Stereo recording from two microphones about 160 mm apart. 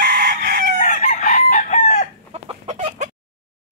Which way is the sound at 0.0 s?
75° right (ahead or behind).